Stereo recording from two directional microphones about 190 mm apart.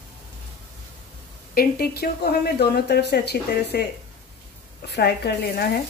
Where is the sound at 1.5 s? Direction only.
50° left (ahead or behind).